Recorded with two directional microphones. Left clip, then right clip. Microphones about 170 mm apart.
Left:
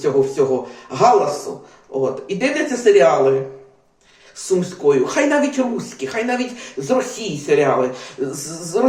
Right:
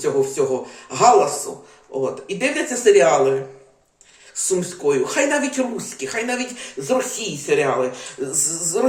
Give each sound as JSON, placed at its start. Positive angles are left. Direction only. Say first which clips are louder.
{"t": 0.0, "sound": "speech", "louder": "left 3 dB", "side_deg": -10}
{"t": 4.4, "sound": "speech", "louder": "left 4 dB", "side_deg": -10}